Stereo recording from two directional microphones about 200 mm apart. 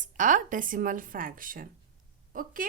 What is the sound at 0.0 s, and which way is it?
Speech, 40° right (ahead or behind).